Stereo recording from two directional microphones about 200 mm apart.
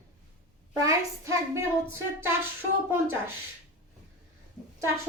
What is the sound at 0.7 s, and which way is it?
A woman's voice, 15° right (ahead or behind).